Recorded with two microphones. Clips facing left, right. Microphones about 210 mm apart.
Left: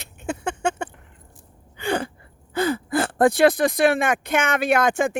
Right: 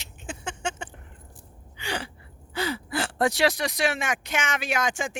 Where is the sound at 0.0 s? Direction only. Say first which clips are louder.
Left 9 dB; 60° left (ahead or behind).